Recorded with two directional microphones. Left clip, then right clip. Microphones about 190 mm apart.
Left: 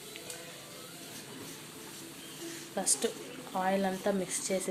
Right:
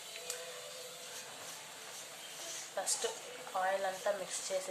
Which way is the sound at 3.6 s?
45° left (ahead or behind).